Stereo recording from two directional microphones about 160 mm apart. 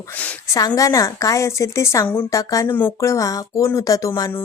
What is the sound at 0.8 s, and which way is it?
Speech, 20° left (ahead or behind).